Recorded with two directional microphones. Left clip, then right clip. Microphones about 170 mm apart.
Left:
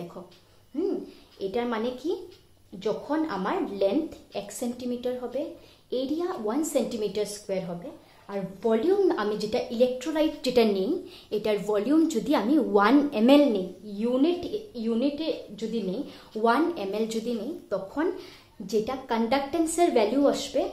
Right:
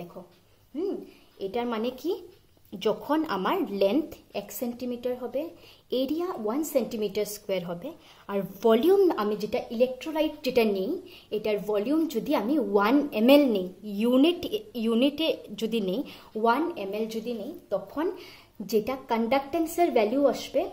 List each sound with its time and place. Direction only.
1.4 s a woman's voice: 20° right (ahead or behind)
2.8 s a woman's voice: 35° right (ahead or behind); by 13.6 s 15° right (ahead or behind)
13.9 s a woman's voice: 30° right (ahead or behind)
17.7 s speech: centre (ahead or behind)
18.7 s a woman's voice: 35° right (ahead or behind)